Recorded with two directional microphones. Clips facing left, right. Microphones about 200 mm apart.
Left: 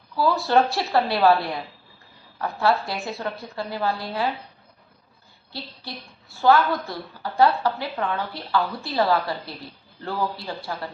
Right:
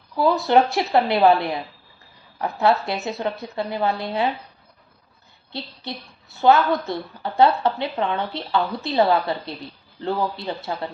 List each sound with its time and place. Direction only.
0.2 s a woman's voice: 20° right (ahead or behind)
5.5 s a woman's voice: 20° right (ahead or behind)